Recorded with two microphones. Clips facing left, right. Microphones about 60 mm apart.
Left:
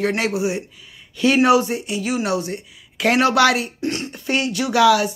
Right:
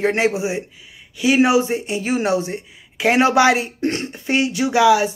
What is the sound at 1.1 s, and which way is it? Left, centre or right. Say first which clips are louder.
Speech: even; centre.